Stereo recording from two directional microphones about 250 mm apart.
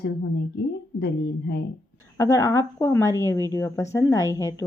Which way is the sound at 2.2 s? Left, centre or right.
Centre.